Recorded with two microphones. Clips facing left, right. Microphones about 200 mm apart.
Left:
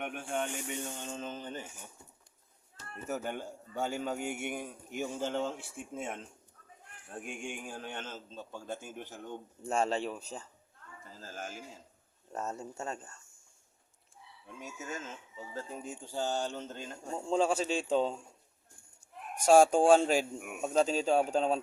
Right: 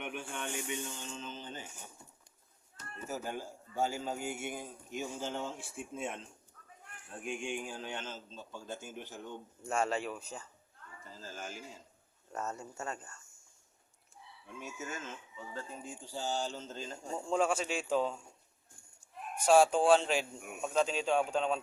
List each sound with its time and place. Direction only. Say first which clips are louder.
0.0 s a man's voice: left 5 dB; 50° left (ahead or behind)
3.1 s a man's voice: left 3 dB; 65° left (ahead or behind)
7.3 s a man's voice: right 4 dB; 50° left (ahead or behind)
9.6 s speech: left 2 dB; 30° left (ahead or behind)
11.2 s a man's voice: left 2 dB; 50° left (ahead or behind)
12.3 s speech: left 2 dB; 30° left (ahead or behind)
14.6 s speech: left 1 dB; 35° left (ahead or behind)
16.0 s a man's voice: left 3 dB; 55° left (ahead or behind)
17.2 s speech: left 2 dB; 30° left (ahead or behind)
19.5 s speech: left 3 dB; 45° left (ahead or behind)